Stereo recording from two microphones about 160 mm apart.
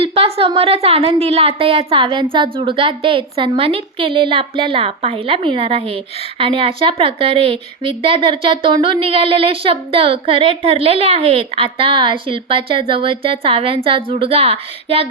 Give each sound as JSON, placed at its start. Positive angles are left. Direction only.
{"t": 0.0, "sound": "speech", "side_deg": -40}